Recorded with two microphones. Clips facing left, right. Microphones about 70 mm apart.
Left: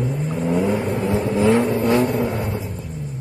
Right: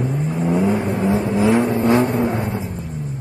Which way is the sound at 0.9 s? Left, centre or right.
Right.